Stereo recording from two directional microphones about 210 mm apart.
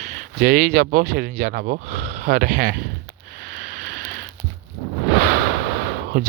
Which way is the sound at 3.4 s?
45° right (ahead or behind).